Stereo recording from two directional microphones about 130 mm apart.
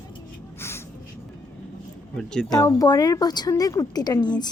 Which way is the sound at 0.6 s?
20° left (ahead or behind).